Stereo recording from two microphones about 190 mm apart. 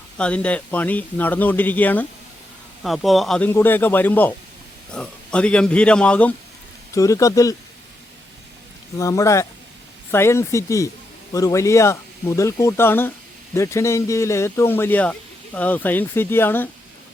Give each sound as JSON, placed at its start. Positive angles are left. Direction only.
{"t": 0.2, "sound": "a man's voice", "side_deg": 5}
{"t": 6.9, "sound": "a man's voice", "side_deg": 15}
{"t": 9.0, "sound": "a man's voice", "side_deg": 15}